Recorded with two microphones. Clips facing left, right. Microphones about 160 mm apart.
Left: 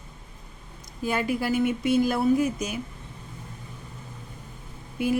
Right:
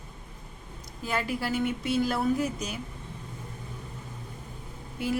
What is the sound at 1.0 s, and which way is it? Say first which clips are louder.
A woman's voice: left 4 dB; 15° left (ahead or behind).